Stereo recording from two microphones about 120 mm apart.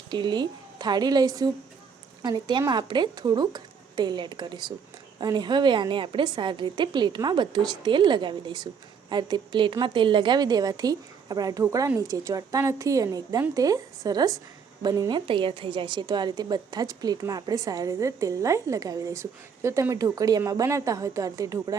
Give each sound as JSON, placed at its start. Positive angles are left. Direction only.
{"t": 0.1, "sound": "a woman's voice", "side_deg": -40}
{"t": 15.3, "sound": "a woman's voice", "side_deg": -45}